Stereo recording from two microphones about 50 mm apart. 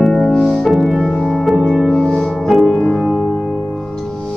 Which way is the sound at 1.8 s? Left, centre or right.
Centre.